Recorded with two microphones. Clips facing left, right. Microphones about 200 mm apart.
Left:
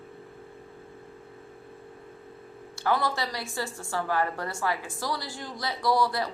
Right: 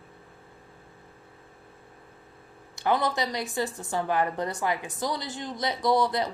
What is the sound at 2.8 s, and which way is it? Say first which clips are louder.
Speech: right 2 dB; 20° right (ahead or behind).